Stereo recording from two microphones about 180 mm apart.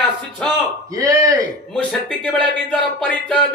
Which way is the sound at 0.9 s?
20° right (ahead or behind).